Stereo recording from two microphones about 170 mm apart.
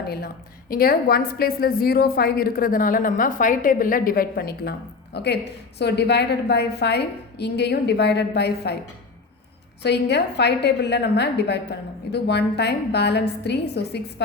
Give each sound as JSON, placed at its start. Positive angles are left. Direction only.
{"t": 0.7, "sound": "a woman's voice", "side_deg": 60}
{"t": 5.1, "sound": "a woman's voice", "side_deg": 80}
{"t": 9.8, "sound": "a woman's voice", "side_deg": 75}